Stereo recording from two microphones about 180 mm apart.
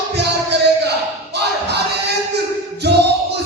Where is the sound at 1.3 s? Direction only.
70° right (ahead or behind).